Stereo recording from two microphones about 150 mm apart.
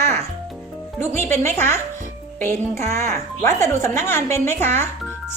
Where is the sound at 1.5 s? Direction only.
15° left (ahead or behind).